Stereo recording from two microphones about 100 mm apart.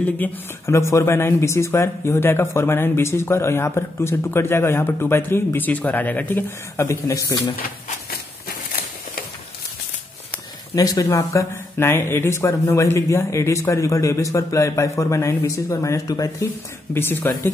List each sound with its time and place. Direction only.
0.2 s speech: 15° left (ahead or behind)
0.7 s a man's voice: 30° left (ahead or behind)
10.7 s speech: 35° left (ahead or behind)
16.9 s a man's voice: 20° left (ahead or behind)